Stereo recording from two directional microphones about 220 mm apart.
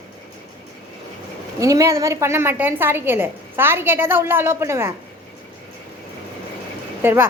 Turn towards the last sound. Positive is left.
turn(degrees=-10)  # may be behind; listen again after turning